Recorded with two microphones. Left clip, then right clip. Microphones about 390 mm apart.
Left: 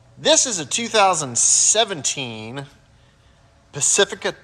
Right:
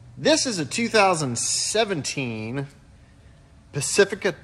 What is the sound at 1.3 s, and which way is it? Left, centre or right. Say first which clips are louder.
Speech: left 8 dB; left.